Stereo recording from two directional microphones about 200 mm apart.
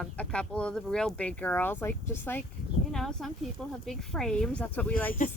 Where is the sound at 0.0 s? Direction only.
5° left (ahead or behind).